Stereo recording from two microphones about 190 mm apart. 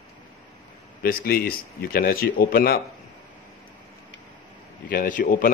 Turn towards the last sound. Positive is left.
turn(degrees=45)  # may be behind; listen again after turning